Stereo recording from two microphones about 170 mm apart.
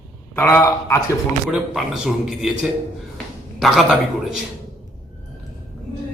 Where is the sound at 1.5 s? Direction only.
5° right (ahead or behind).